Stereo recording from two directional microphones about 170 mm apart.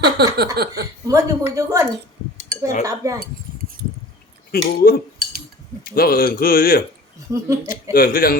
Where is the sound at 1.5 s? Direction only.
20° right (ahead or behind).